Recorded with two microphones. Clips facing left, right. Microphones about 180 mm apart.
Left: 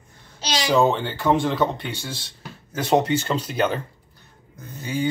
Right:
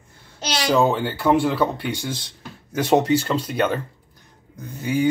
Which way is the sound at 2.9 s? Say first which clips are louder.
Right 2 dB; 5° right (ahead or behind).